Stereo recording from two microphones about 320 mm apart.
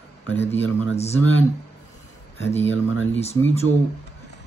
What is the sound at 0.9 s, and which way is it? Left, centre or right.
Speech, centre.